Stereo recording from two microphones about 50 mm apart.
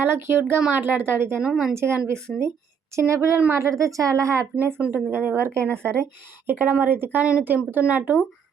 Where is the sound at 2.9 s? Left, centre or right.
Right.